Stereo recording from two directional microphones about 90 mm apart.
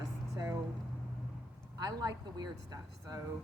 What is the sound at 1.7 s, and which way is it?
Speech, 50° right (ahead or behind).